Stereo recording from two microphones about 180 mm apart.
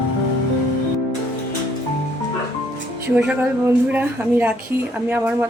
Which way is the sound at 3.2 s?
15° right (ahead or behind).